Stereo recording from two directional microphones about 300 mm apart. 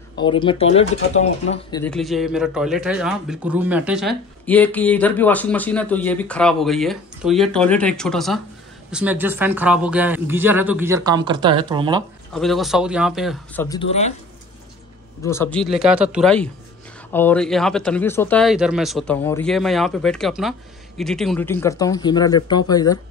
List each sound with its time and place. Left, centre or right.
0.2 s speech: centre
1.9 s speech: centre
12.4 s speech: centre
15.2 s speech: centre